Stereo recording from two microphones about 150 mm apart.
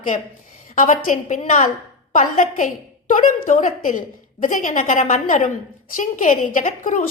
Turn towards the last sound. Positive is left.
turn(degrees=55)  # may be behind; listen again after turning